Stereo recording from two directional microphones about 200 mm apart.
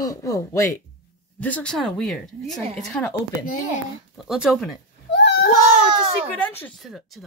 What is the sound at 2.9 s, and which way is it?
Speech, 10° left (ahead or behind).